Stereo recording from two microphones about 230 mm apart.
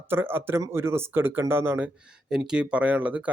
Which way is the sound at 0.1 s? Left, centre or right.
Centre.